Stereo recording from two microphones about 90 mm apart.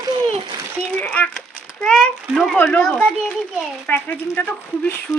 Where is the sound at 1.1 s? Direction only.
15° left (ahead or behind).